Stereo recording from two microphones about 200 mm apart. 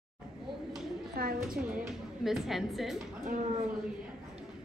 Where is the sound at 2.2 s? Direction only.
Centre (ahead or behind).